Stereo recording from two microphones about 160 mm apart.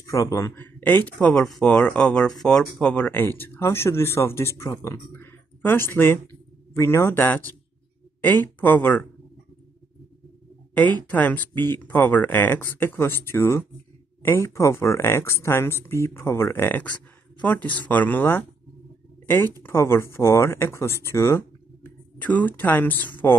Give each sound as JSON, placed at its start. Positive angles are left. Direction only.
{"t": 0.0, "sound": "speech", "side_deg": 20}
{"t": 10.7, "sound": "speech", "side_deg": 10}